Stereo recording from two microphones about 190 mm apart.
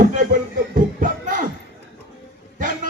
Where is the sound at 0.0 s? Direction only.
45° right (ahead or behind).